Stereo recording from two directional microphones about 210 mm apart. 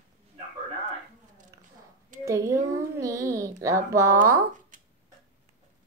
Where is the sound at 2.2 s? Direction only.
15° right (ahead or behind).